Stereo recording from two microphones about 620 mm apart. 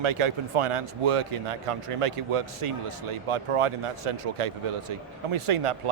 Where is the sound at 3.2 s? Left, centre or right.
Right.